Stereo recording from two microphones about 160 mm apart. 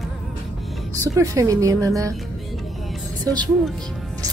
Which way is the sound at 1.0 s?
20° right (ahead or behind).